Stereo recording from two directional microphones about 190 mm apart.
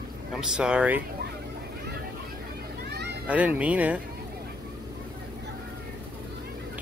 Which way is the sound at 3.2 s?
5° right (ahead or behind).